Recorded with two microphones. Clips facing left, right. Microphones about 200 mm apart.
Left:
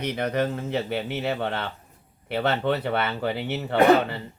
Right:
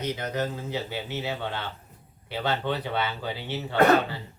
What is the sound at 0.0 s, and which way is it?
Speech, 60° left (ahead or behind).